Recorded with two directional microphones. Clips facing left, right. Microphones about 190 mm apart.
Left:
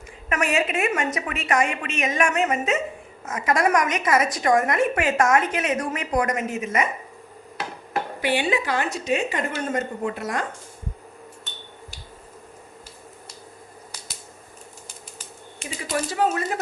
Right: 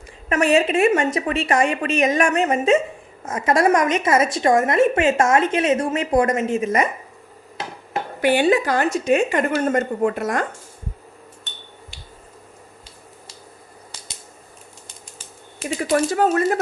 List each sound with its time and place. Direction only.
0.3 s a woman's voice: 30° right (ahead or behind)
8.2 s a woman's voice: 45° right (ahead or behind)
15.8 s a woman's voice: 50° right (ahead or behind)